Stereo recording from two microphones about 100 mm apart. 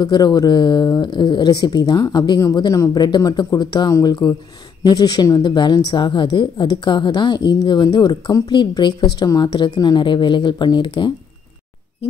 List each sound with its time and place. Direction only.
0.0 s a woman's voice: 40° left (ahead or behind)